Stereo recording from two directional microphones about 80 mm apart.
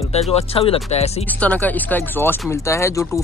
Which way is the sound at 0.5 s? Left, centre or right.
Left.